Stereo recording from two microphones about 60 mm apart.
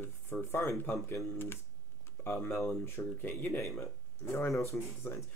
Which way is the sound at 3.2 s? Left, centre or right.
Left.